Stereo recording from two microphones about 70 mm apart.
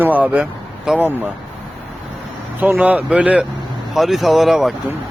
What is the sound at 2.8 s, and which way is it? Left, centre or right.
Speech, centre.